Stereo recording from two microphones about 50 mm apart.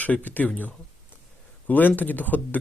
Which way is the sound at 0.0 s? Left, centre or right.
Left.